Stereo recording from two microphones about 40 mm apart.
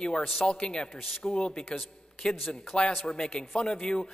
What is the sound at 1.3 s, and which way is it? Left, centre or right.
A man's voice, left.